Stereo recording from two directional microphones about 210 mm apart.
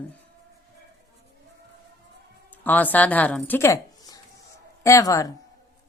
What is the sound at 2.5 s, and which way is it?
A woman's voice, 10° left (ahead or behind).